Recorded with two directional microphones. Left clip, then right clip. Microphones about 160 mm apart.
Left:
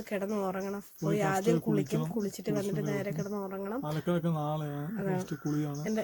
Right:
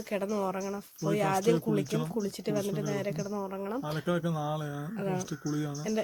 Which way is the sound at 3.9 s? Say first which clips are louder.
Right 1 dB; centre (ahead or behind).